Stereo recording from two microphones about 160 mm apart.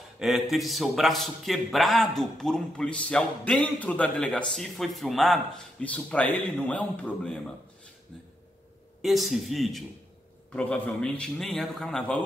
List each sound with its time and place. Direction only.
0.2 s a man's voice: centre (ahead or behind)
9.0 s a man's voice: centre (ahead or behind)